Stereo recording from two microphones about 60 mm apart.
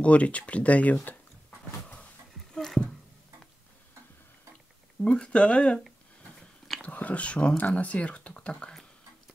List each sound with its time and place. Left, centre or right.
0.0 s speech: left
2.5 s a sound: centre
5.0 s speech: centre
6.8 s speech: left